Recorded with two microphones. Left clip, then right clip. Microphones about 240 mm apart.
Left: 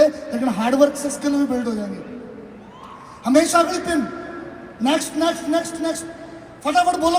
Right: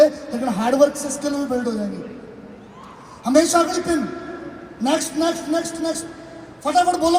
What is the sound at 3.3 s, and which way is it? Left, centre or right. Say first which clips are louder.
Speech: even; left.